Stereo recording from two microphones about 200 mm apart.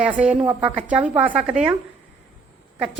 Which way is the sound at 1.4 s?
30° right (ahead or behind).